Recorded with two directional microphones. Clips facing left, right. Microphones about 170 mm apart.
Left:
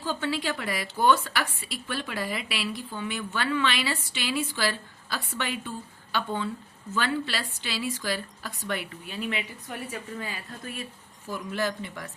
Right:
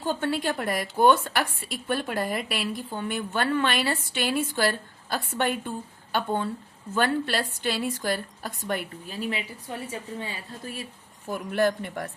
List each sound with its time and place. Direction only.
0.0 s a woman's voice: 50° right (ahead or behind); by 10.8 s 30° right (ahead or behind)
11.3 s a man's voice: 55° right (ahead or behind)